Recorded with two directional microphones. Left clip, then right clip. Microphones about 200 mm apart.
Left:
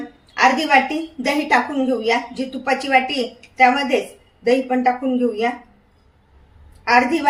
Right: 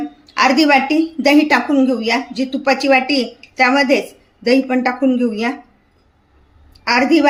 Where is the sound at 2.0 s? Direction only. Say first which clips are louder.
Right 2 dB; 55° right (ahead or behind).